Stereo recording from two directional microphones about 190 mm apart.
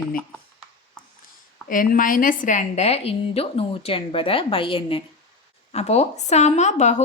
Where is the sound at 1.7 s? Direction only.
45° left (ahead or behind).